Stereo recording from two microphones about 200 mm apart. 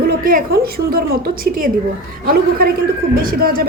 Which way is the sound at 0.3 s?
45° right (ahead or behind).